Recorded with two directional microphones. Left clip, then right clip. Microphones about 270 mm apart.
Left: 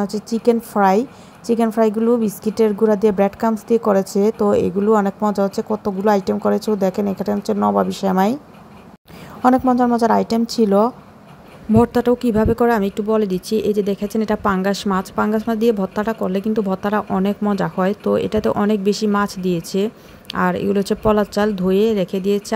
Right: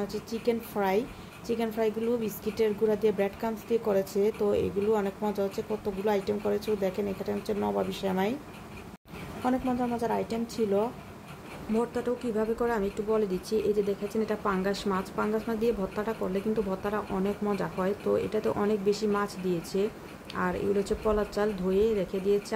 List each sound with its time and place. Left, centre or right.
0.0 s speech: left
9.4 s a woman's voice: left